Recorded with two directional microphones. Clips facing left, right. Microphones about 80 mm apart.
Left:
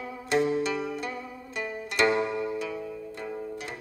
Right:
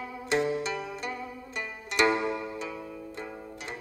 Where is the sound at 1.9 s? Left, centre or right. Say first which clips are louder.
Even; centre.